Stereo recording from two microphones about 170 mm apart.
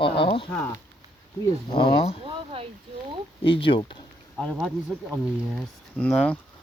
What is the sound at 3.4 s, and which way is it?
Speech, 30° left (ahead or behind).